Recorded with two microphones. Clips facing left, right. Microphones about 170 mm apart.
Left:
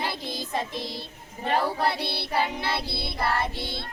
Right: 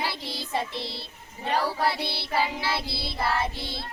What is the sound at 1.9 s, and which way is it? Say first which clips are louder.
Music: left 1 dB; 55° left (ahead or behind).